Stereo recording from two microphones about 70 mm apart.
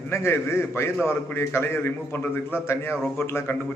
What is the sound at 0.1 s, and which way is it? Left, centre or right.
A man's voice, left.